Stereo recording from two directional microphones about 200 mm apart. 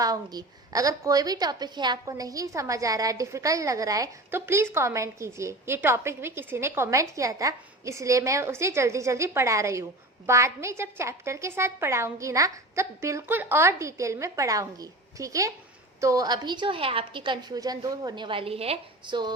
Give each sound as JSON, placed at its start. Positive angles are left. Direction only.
{"t": 0.0, "sound": "a woman's voice", "side_deg": -20}